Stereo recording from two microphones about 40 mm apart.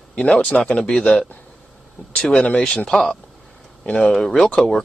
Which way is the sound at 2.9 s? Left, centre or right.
Centre.